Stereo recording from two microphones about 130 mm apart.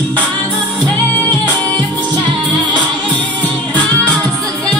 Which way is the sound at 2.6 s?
35° right (ahead or behind).